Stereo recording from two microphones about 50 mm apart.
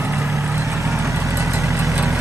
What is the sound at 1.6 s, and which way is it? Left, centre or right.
Vehicle, right.